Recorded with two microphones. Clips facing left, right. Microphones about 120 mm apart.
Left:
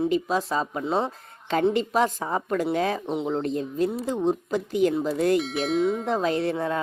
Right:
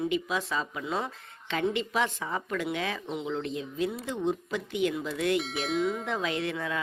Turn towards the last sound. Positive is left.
turn(degrees=35)  # may be behind; listen again after turning